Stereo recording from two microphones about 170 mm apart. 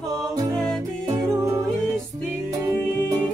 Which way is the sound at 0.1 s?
20° right (ahead or behind).